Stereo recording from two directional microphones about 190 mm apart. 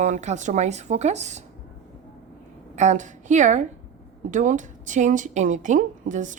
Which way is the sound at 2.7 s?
40° right (ahead or behind).